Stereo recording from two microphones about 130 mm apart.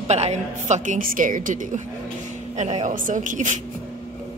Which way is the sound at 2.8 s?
80° right.